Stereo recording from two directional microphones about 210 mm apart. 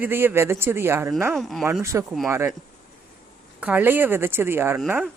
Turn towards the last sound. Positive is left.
turn(degrees=-10)  # may be behind; listen again after turning